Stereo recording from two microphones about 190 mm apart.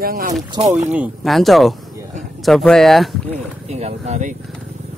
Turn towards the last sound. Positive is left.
turn(degrees=-40)  # may be behind; listen again after turning